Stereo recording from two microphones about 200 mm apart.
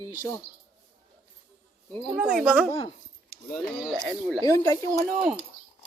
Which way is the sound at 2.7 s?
15° left (ahead or behind).